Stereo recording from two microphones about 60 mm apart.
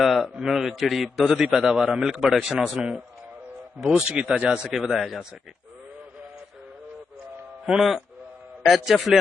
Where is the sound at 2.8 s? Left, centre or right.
Centre.